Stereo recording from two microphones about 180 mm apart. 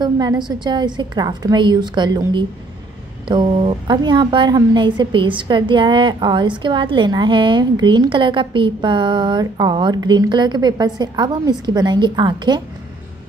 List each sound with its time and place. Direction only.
0.0 s a woman's voice: 25° right (ahead or behind)